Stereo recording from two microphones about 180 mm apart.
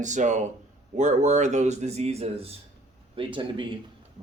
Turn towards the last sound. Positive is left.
turn(degrees=-25)  # may be behind; listen again after turning